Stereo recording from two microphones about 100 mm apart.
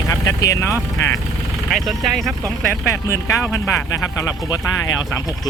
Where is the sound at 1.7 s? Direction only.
Centre (ahead or behind).